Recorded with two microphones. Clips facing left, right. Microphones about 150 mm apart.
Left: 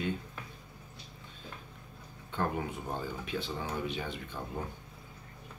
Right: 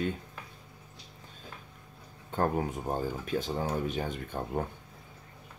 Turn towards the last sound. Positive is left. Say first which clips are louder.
# right 6 dB
turn(degrees=-50)  # may be behind; listen again after turning